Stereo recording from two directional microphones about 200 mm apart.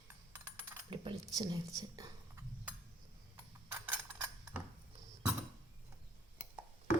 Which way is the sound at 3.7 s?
10° right (ahead or behind).